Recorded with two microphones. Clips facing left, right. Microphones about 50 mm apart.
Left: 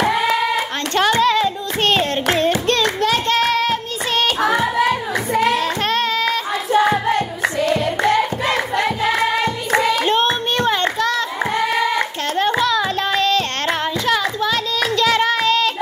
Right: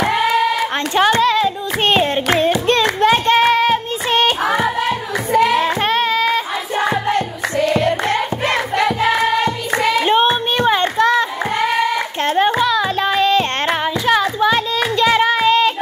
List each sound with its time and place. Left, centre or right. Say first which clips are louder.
0.9 s hands: right 1 dB; centre
1.8 s clapping: right 2 dB; centre
2.2 s hands: right 2 dB; centre
2.7 s child singing: right 4 dB; right
5.5 s child singing: right 3 dB; centre
7.1 s singing: even; right
8.0 s music: left 2 dB; right
10.0 s a sound: right 3 dB; centre
12.3 s music: right 4 dB; centre